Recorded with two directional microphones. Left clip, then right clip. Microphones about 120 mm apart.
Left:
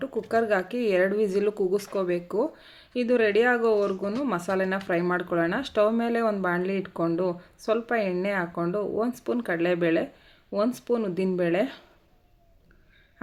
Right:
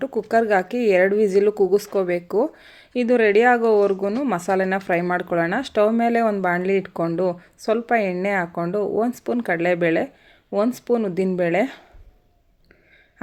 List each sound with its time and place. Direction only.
0.0 s speech: 45° right (ahead or behind)